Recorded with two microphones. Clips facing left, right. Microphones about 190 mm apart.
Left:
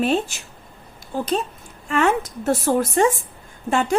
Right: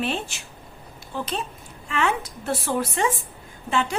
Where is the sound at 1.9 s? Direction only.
45° left (ahead or behind).